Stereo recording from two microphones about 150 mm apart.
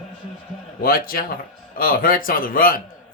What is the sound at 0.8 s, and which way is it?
A man's voice, 75° left (ahead or behind).